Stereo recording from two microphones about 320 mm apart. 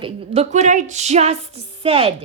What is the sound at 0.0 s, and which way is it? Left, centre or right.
A woman's voice, centre.